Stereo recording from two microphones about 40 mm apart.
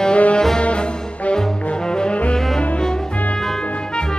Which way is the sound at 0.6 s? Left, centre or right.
Left.